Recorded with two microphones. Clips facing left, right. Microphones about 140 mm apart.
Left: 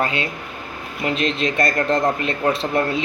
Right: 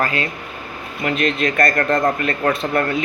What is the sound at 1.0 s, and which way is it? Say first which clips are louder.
Speech: right 2 dB; 50° right (ahead or behind).